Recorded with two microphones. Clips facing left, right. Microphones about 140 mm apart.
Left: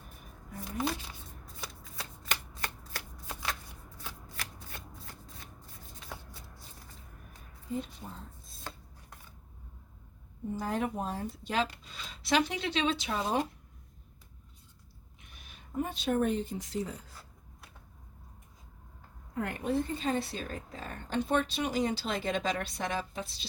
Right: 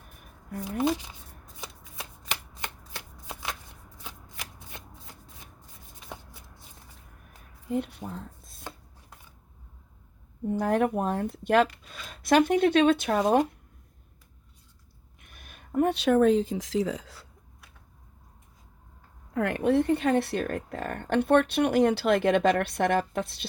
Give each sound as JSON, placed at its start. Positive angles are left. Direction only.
{"t": 0.6, "sound": "shuffling cards", "side_deg": -15}
{"t": 7.7, "sound": "speech", "side_deg": -65}
{"t": 8.7, "sound": "chopping", "side_deg": -15}
{"t": 10.5, "sound": "speech", "side_deg": -60}
{"t": 15.2, "sound": "a sound", "side_deg": -55}
{"t": 19.3, "sound": "speech", "side_deg": -90}